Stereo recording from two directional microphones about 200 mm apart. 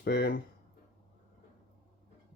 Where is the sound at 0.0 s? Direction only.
55° left (ahead or behind).